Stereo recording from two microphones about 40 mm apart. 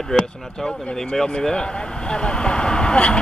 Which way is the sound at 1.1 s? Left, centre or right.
Left.